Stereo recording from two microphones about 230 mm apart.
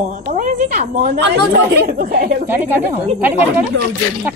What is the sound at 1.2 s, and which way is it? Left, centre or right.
A woman's voice, right.